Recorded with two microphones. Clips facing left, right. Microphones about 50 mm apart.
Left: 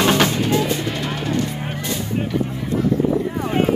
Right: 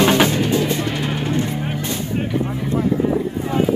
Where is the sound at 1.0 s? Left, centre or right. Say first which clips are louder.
Right 1 dB; centre.